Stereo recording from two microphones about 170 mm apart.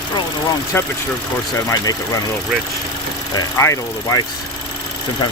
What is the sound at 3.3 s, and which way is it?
Speech, 20° left (ahead or behind).